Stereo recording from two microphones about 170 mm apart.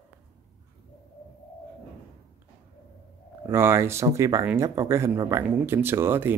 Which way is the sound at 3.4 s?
15° right (ahead or behind).